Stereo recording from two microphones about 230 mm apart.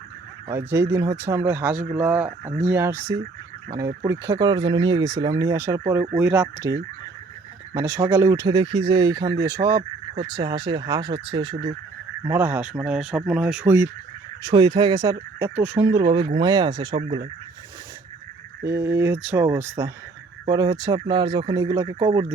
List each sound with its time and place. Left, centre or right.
0.4 s speech: centre
12.2 s speech: centre
18.6 s speech: centre